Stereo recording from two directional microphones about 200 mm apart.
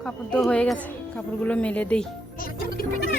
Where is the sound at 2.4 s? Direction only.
45° left (ahead or behind).